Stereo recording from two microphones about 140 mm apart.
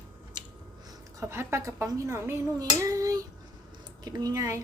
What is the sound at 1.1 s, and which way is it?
A woman's voice, 20° right (ahead or behind).